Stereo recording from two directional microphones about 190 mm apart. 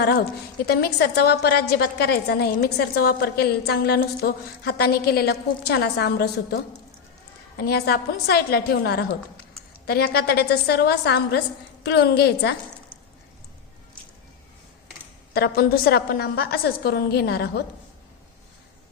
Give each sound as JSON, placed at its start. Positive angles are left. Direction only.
{"t": 0.6, "sound": "a woman's voice", "side_deg": 55}
{"t": 15.3, "sound": "a woman's voice", "side_deg": 55}